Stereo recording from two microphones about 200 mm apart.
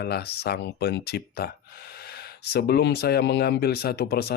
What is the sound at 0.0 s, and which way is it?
Speech, 50° left (ahead or behind).